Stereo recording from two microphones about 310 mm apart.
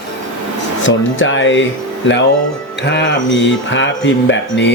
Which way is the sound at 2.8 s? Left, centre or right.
Left.